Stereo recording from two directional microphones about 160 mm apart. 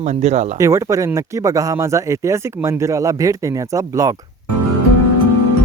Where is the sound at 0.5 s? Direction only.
20° right (ahead or behind).